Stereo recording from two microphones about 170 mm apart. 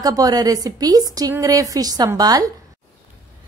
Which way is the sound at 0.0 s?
20° right (ahead or behind).